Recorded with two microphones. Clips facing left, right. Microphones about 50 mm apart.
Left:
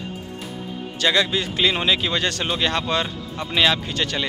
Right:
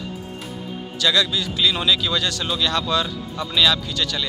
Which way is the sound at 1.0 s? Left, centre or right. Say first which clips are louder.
Even; left.